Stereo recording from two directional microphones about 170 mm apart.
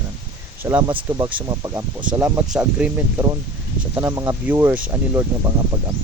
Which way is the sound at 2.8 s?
5° right (ahead or behind).